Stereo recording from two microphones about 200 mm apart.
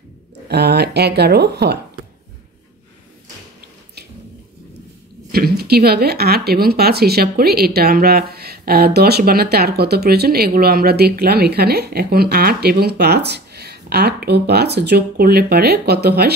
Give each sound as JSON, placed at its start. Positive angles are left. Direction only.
{"t": 0.5, "sound": "speech", "side_deg": -55}
{"t": 5.3, "sound": "speech", "side_deg": -50}